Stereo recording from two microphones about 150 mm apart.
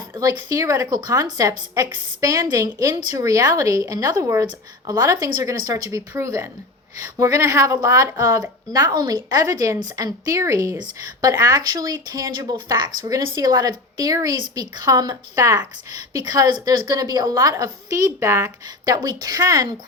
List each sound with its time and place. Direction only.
0.2 s a woman's voice: 25° right (ahead or behind)